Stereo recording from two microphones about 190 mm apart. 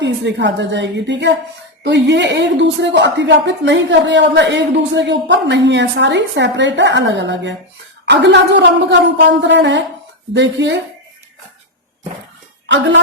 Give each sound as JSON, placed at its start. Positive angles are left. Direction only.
{"t": 0.0, "sound": "speech", "side_deg": -70}
{"t": 12.6, "sound": "speech", "side_deg": -70}